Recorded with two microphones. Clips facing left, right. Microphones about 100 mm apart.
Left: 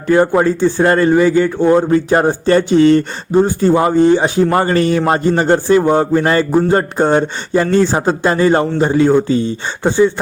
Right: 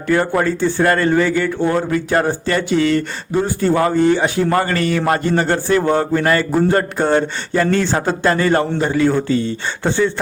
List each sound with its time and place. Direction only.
0.1 s a man's voice: 20° left (ahead or behind)